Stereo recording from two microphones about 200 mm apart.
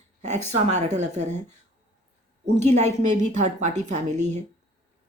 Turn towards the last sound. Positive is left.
turn(degrees=-35)  # may be behind; listen again after turning